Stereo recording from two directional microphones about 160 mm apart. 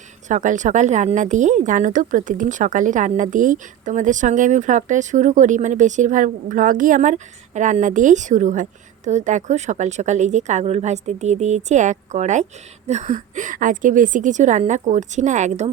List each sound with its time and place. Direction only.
0.3 s a woman's voice: 50° right (ahead or behind)